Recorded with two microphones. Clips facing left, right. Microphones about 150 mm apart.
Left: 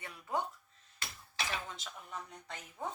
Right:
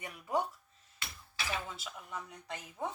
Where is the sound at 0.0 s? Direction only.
15° right (ahead or behind).